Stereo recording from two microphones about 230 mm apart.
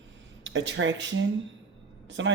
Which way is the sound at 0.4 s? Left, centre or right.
Right.